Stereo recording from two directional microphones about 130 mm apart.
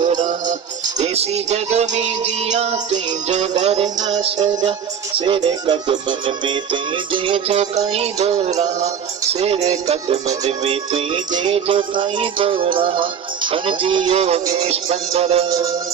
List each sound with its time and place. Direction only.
0.0 s music: 75° right (ahead or behind)
0.9 s music: 55° right (ahead or behind)
4.1 s music: 45° right (ahead or behind)
10.9 s music: 35° right (ahead or behind)
15.4 s music: 25° right (ahead or behind)